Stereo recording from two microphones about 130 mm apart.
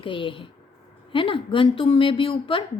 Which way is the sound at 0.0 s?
40° left (ahead or behind).